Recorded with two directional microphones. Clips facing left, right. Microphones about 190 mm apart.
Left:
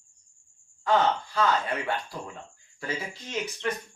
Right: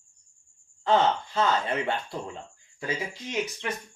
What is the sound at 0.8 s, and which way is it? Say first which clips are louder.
Speech: right 1 dB; 25° right (ahead or behind).